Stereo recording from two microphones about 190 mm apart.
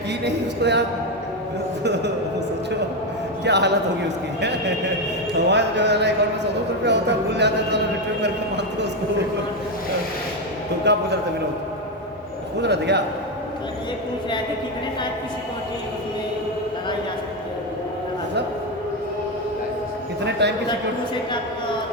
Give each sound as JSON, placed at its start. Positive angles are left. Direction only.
{"t": 0.3, "sound": "speech", "side_deg": -65}
{"t": 3.4, "sound": "speech", "side_deg": -65}
{"t": 5.5, "sound": "speech", "side_deg": -65}
{"t": 10.9, "sound": "speech", "side_deg": -65}
{"t": 12.6, "sound": "speech", "side_deg": -65}
{"t": 20.4, "sound": "speech", "side_deg": -65}